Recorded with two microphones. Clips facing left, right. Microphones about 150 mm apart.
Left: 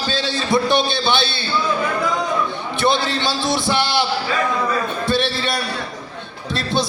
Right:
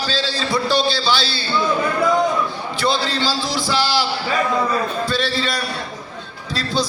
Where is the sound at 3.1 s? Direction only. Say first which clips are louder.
Left 1 dB; 20° left (ahead or behind).